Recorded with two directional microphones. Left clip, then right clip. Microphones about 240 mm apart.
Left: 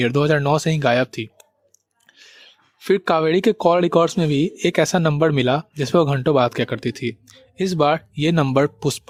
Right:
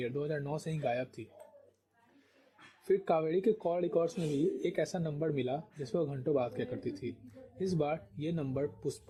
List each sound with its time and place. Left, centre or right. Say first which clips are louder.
0.0 s speech: left 18 dB; left
2.8 s speech: left 13 dB; left